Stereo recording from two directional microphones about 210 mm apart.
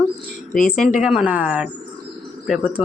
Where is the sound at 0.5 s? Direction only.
40° left (ahead or behind).